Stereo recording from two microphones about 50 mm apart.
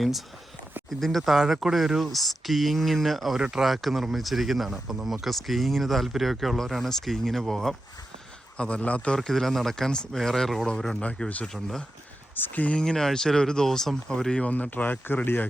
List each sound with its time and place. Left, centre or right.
0.9 s speech: centre
8.5 s a man's voice: left
9.1 s speech: centre
12.4 s speech: left
12.7 s speech: centre
14.4 s speech: left
15.0 s speech: left